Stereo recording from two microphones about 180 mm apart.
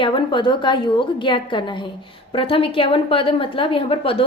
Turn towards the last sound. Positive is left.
turn(degrees=30)  # may be behind; listen again after turning